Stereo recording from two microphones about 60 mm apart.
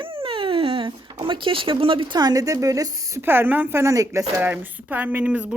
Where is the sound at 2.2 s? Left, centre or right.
Right.